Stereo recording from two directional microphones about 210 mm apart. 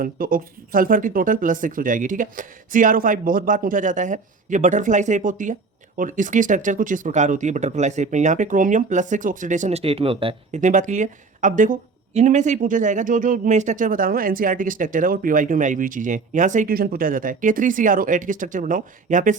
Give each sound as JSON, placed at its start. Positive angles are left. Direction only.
{"t": 0.0, "sound": "speech", "side_deg": -40}